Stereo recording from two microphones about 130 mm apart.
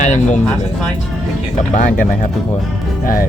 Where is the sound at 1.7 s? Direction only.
80° left.